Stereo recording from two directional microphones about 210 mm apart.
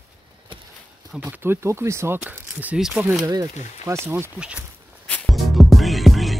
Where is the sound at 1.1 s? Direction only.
10° right (ahead or behind).